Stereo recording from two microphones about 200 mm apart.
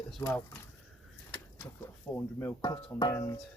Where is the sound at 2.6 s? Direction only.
20° left (ahead or behind).